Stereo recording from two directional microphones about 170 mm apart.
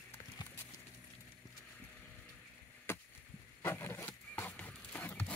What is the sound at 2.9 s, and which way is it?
Chop, 15° left (ahead or behind).